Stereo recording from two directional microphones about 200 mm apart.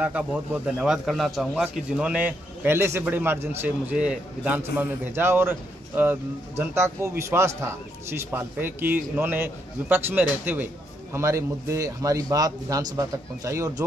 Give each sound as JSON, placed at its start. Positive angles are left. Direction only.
{"t": 0.0, "sound": "a man's voice", "side_deg": -5}